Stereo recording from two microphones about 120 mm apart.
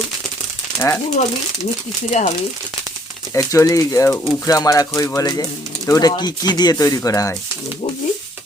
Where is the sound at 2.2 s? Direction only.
75° left (ahead or behind).